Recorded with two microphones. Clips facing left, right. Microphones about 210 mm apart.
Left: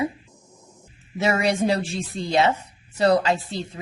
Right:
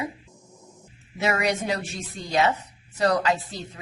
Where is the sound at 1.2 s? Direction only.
30° left (ahead or behind).